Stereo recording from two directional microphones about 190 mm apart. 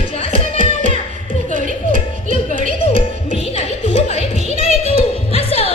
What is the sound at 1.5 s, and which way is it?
Music, 45° right (ahead or behind).